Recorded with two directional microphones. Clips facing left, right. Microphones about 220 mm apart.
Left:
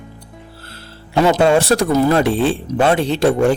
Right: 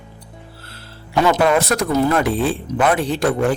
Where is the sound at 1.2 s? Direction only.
25° left (ahead or behind).